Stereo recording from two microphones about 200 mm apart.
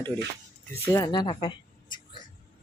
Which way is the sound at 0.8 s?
20° left (ahead or behind).